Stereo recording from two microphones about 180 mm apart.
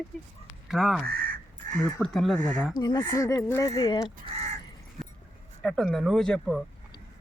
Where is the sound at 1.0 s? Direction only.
55° right (ahead or behind).